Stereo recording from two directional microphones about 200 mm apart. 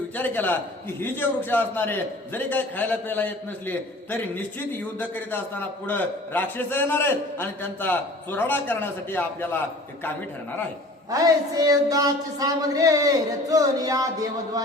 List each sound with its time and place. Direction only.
0.1 s a man's voice: 10° left (ahead or behind)
11.1 s speech: 20° right (ahead or behind)